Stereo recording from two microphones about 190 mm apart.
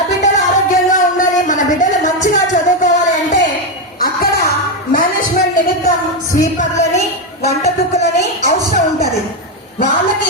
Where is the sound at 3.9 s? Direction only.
50° left (ahead or behind).